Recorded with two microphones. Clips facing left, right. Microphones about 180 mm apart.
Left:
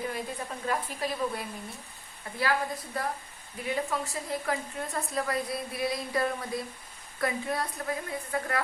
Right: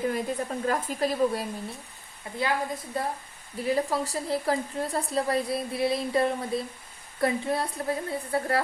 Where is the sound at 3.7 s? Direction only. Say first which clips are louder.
Right 5 dB; 35° right (ahead or behind).